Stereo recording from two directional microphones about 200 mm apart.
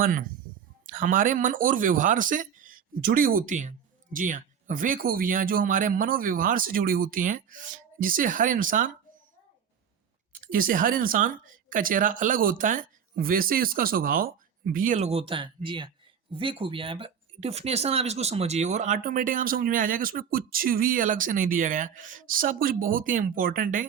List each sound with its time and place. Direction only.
0.0 s speech: 45° right (ahead or behind)
10.4 s speech: 45° right (ahead or behind)